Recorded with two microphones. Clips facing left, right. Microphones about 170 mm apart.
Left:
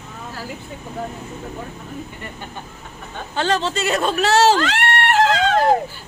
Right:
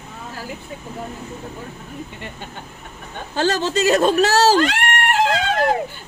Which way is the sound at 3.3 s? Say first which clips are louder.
Right 2 dB; 40° right (ahead or behind).